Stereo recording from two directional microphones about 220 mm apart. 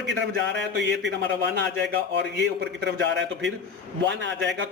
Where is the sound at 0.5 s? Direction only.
55° right (ahead or behind).